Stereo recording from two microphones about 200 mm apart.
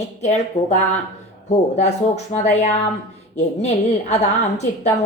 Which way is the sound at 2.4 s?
35° left (ahead or behind).